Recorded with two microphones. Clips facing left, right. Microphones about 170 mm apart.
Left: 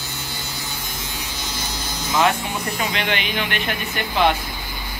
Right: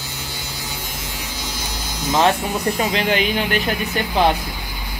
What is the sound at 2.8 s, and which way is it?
Speech, 35° right (ahead or behind).